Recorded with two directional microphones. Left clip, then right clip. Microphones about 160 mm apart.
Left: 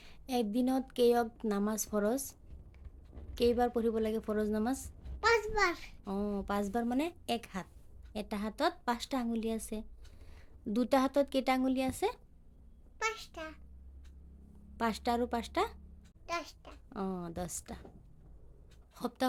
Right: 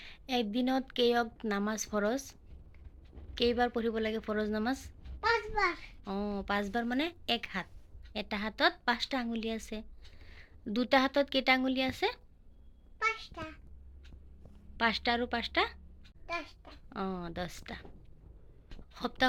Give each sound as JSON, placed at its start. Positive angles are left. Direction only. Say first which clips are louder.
{"t": 0.0, "sound": "a sound", "louder": "right 1 dB", "side_deg": 15}
{"t": 0.5, "sound": "a woman's voice", "louder": "right 1 dB", "side_deg": 15}
{"t": 6.1, "sound": "a woman's voice", "louder": "right 1 dB", "side_deg": 15}
{"t": 14.8, "sound": "a woman's voice", "louder": "right 3 dB", "side_deg": 20}
{"t": 16.9, "sound": "a woman's voice", "louder": "right 2 dB", "side_deg": 15}
{"t": 18.9, "sound": "a woman's voice", "louder": "right 4 dB", "side_deg": 15}